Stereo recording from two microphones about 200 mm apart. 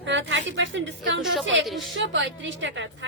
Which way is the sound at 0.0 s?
65° right (ahead or behind).